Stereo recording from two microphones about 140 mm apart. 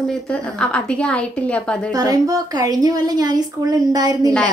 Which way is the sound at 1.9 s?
25° right (ahead or behind).